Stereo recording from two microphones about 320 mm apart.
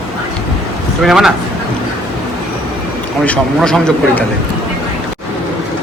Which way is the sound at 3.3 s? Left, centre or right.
Centre.